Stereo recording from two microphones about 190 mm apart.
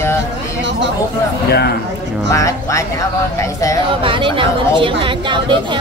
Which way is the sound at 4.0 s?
25° right (ahead or behind).